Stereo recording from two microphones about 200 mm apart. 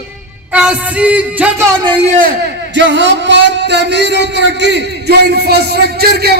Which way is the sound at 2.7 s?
65° right (ahead or behind).